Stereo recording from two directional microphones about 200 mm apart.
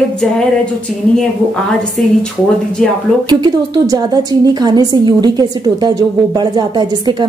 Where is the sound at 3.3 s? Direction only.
20° right (ahead or behind).